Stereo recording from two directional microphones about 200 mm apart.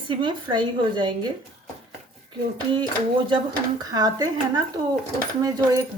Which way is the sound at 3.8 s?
20° right (ahead or behind).